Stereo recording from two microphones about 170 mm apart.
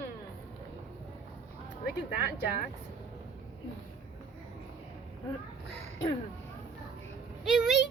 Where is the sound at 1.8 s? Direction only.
65° left (ahead or behind).